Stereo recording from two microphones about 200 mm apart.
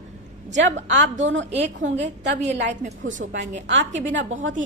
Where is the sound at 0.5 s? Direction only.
60° right (ahead or behind).